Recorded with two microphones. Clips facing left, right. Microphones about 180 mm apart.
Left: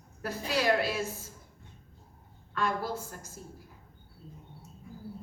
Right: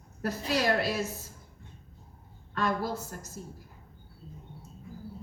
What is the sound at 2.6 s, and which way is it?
Speech, 40° right (ahead or behind).